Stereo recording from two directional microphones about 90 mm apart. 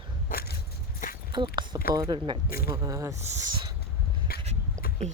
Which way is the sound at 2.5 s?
35° right (ahead or behind).